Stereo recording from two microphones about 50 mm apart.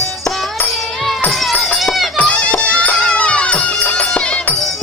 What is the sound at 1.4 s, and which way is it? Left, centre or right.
Run, centre.